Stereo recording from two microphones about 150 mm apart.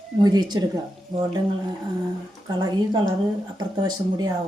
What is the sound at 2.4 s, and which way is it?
A woman's voice, 25° right (ahead or behind).